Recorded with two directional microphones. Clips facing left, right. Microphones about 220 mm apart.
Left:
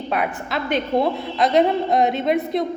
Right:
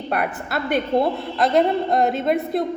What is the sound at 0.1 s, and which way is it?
A woman's voice, 5° right (ahead or behind).